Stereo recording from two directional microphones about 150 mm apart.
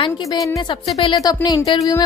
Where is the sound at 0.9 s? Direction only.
35° left (ahead or behind).